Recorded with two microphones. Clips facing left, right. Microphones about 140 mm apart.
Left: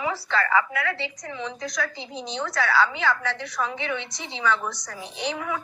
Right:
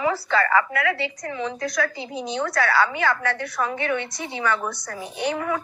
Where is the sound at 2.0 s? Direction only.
10° right (ahead or behind).